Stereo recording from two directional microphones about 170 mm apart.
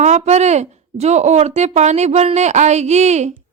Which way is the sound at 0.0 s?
40° right (ahead or behind).